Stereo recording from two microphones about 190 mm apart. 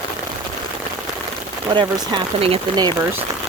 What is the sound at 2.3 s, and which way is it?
Speech, 30° right (ahead or behind).